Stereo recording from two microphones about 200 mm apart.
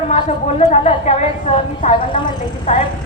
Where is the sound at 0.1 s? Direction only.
35° left (ahead or behind).